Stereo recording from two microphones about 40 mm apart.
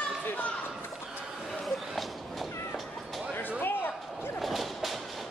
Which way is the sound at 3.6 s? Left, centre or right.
Left.